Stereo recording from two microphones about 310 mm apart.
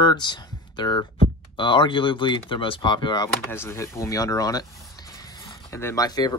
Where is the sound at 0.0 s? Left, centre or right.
Centre.